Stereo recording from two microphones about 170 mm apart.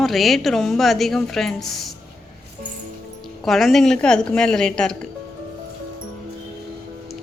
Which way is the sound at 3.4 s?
Centre (ahead or behind).